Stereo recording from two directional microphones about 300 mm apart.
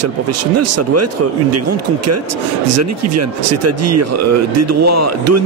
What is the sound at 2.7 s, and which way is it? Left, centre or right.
Speech, right.